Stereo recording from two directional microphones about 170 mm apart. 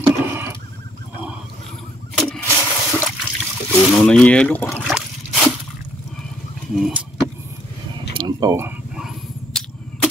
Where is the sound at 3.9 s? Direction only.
5° left (ahead or behind).